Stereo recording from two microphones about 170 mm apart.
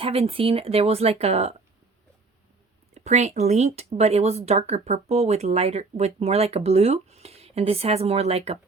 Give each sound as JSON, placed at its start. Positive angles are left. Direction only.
{"t": 0.0, "sound": "speech", "side_deg": -35}
{"t": 2.9, "sound": "speech", "side_deg": -40}